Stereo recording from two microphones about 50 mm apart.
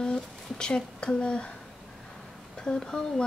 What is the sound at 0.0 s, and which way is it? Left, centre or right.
Speech, centre.